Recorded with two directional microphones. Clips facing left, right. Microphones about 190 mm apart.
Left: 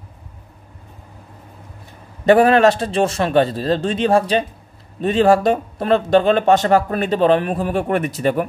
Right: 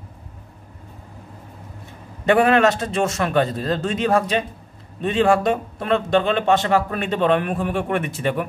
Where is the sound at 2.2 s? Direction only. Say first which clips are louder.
Left 4 dB; 35° left (ahead or behind).